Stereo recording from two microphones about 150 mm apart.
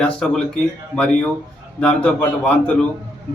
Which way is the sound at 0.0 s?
5° left (ahead or behind).